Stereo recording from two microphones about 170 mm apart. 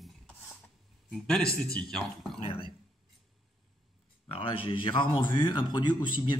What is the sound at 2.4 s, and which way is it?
Speech, 30° left (ahead or behind).